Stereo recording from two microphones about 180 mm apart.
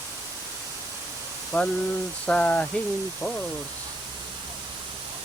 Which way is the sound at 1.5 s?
5° left (ahead or behind).